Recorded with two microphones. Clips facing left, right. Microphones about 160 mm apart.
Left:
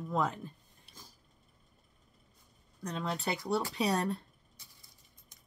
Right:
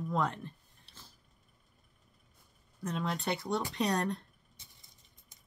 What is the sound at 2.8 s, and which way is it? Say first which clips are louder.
Speech: right 1 dB; centre (ahead or behind).